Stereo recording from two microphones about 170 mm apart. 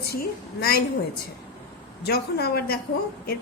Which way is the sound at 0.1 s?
65° left (ahead or behind).